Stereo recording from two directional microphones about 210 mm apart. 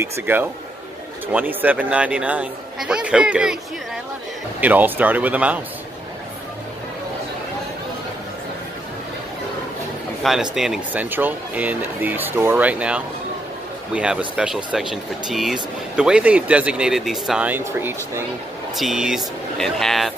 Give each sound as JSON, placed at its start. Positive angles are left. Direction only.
{"t": 0.0, "sound": "speech", "side_deg": -10}
{"t": 4.6, "sound": "speech", "side_deg": -10}
{"t": 10.2, "sound": "speech", "side_deg": 0}